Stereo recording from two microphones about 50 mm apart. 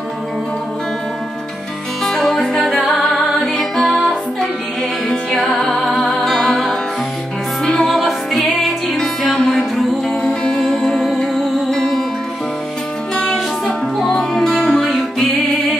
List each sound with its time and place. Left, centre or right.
2.0 s music: centre
5.1 s music: centre
7.6 s music: centre
9.4 s music: centre
13.1 s music: centre